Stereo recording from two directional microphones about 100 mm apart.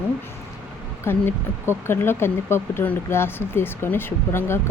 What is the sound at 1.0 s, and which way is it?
Speech, 25° left (ahead or behind).